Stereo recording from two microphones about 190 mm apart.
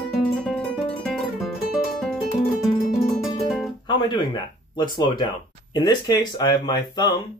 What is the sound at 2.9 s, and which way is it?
Music, centre (ahead or behind).